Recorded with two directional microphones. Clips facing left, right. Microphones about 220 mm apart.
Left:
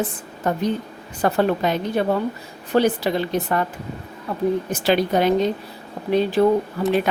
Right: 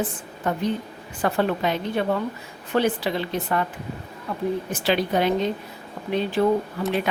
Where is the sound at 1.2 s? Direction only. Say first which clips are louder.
Left 3 dB; 40° left (ahead or behind).